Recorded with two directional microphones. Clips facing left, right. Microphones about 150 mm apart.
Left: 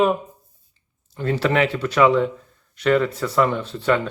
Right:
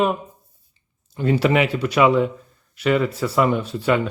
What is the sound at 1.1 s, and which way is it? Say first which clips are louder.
Speech: right 2 dB; 15° right (ahead or behind).